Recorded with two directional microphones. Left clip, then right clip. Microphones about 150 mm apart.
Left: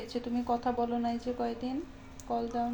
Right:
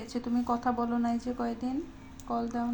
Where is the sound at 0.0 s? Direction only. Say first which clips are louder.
Right 2 dB; 15° right (ahead or behind).